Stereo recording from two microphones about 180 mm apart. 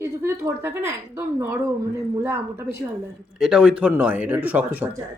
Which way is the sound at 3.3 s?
5° right (ahead or behind).